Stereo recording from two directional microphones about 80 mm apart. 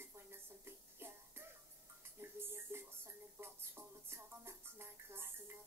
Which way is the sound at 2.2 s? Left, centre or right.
Right.